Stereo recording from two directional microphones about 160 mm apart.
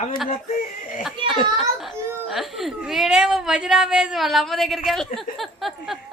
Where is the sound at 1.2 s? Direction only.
30° right (ahead or behind).